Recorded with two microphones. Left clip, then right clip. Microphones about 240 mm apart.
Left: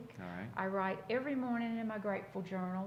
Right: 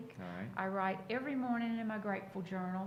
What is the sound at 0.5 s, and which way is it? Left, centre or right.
A woman's voice, left.